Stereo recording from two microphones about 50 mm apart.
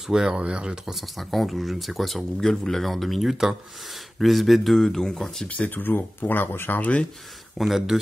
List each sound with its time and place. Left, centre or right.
0.0 s speech: centre
0.9 s speech: centre
5.5 s speech: left
6.8 s speech: left
7.5 s speech: centre